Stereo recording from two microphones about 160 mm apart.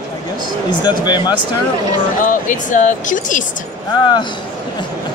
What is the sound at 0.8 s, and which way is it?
Speech, 25° left (ahead or behind).